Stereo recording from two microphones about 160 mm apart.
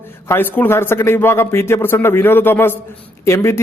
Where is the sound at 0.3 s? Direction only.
10° left (ahead or behind).